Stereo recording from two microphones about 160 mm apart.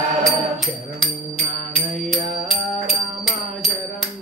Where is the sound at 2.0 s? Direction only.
Centre (ahead or behind).